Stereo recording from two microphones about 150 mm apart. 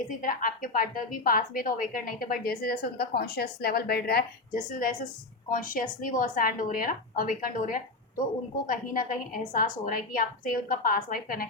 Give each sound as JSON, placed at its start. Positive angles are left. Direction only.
{"t": 0.2, "sound": "a woman's voice", "side_deg": 65}